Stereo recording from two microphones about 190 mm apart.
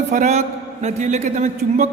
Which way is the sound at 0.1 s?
40° right (ahead or behind).